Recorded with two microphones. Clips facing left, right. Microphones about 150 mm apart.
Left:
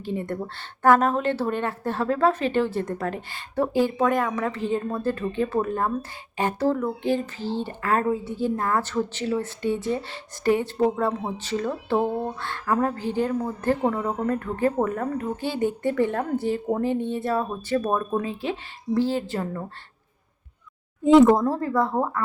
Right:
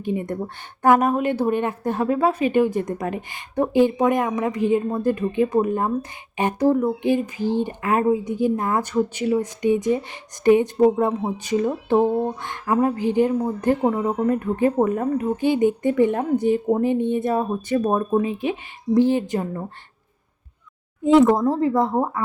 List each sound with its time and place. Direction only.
0.0 s a woman's voice: 15° right (ahead or behind)
21.0 s speech: centre (ahead or behind)
21.5 s speech: 20° right (ahead or behind)